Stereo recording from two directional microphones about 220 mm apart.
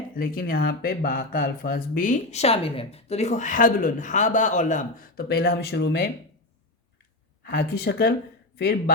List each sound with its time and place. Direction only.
0.2 s speech: 40° left (ahead or behind)
7.4 s speech: 45° left (ahead or behind)